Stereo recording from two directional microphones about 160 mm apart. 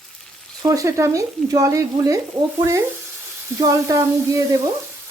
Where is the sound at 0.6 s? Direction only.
20° right (ahead or behind).